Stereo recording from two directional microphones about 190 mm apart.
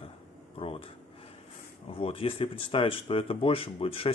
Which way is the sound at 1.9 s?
30° left (ahead or behind).